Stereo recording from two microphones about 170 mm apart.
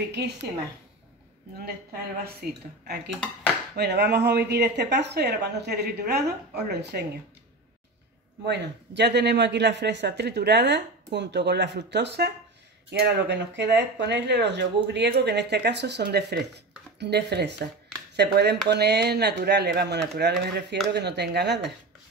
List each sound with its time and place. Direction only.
0.1 s speech: 80° right
2.4 s speech: 60° right (ahead or behind)
3.7 s speech: 80° right
8.5 s speech: 85° right